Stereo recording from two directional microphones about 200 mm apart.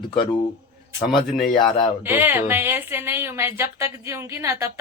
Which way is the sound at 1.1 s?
Centre (ahead or behind).